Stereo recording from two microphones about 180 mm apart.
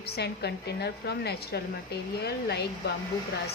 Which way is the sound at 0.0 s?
65° left (ahead or behind).